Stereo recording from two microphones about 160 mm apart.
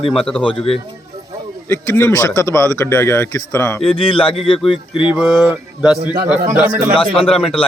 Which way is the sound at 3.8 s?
35° left (ahead or behind).